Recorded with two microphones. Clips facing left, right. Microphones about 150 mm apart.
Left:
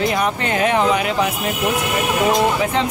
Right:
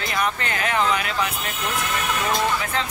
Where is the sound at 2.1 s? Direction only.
25° left (ahead or behind).